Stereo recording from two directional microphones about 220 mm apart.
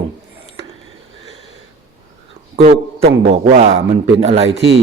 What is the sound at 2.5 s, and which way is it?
A man's voice, 30° right (ahead or behind).